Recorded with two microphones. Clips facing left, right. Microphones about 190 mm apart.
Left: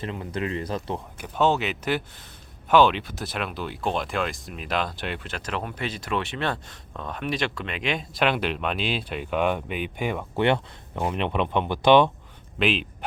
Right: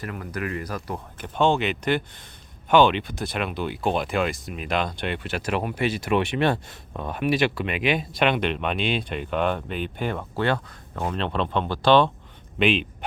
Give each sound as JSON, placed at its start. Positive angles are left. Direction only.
{"t": 0.0, "sound": "speech", "side_deg": 25}
{"t": 1.2, "sound": "speech", "side_deg": 5}
{"t": 12.5, "sound": "speech", "side_deg": 0}